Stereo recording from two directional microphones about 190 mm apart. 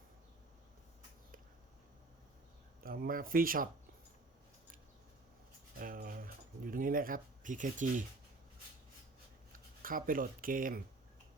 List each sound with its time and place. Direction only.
2.8 s speech: 50° right (ahead or behind)
5.8 s a sound: 50° right (ahead or behind)
9.8 s speech: 50° right (ahead or behind)